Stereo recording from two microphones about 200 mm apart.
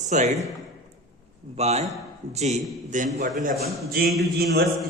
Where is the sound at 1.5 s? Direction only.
35° right (ahead or behind); by 4.7 s 50° right (ahead or behind).